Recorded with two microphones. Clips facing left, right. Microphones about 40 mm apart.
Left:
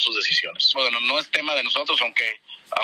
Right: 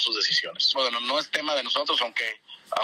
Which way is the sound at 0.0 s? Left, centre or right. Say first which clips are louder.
Left 4 dB; left.